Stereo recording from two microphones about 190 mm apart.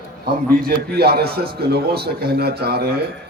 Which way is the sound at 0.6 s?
55° right (ahead or behind).